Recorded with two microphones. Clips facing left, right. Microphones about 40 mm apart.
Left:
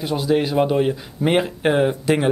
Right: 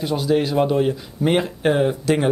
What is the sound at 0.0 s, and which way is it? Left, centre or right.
Speech, centre.